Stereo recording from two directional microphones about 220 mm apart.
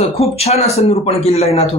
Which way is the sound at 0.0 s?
30° left (ahead or behind).